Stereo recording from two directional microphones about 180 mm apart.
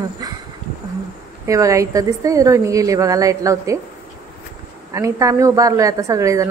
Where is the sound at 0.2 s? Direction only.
20° right (ahead or behind).